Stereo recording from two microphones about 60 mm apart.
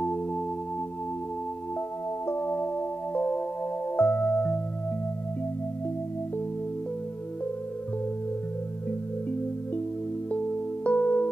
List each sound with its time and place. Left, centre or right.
2.2 s music: left
10.3 s music: left